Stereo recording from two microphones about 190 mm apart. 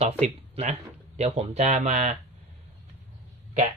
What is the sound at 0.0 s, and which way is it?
Speech, 35° right (ahead or behind).